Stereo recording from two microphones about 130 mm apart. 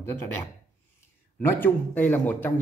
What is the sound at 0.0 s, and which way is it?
Speech, 20° left (ahead or behind).